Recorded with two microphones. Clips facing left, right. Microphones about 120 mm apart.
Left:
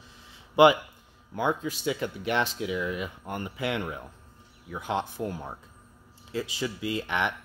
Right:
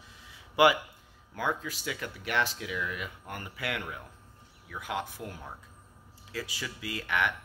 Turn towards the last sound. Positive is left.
turn(degrees=25)  # may be behind; listen again after turning